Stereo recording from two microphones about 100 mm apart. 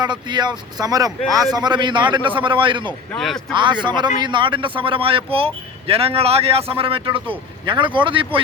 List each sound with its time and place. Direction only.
0.0 s a man's voice: 45° right (ahead or behind)
3.2 s speech: 5° left (ahead or behind)
3.5 s speech: 50° right (ahead or behind)